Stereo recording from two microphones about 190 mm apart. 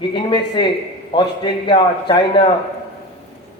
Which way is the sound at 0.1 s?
25° left (ahead or behind).